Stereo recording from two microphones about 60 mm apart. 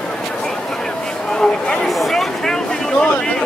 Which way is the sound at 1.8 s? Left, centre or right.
Centre.